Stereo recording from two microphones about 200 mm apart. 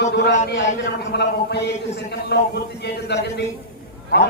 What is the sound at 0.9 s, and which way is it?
A man's voice, 55° left (ahead or behind).